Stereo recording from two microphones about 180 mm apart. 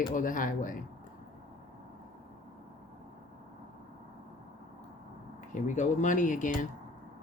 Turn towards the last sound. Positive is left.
turn(degrees=45)  # may be behind; listen again after turning